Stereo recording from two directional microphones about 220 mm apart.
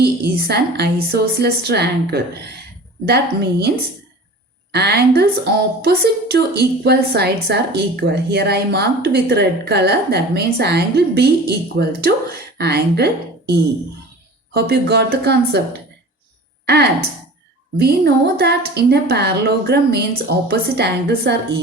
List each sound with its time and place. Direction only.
0.0 s a woman's voice: 45° right (ahead or behind)
4.7 s a woman's voice: 50° right (ahead or behind)
14.5 s a woman's voice: 50° right (ahead or behind)
16.6 s a woman's voice: 50° right (ahead or behind)